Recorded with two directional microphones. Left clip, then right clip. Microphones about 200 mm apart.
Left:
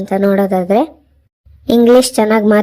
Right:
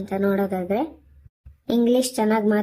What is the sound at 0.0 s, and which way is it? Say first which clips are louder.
A woman's voice: left 10 dB; 35° left (ahead or behind).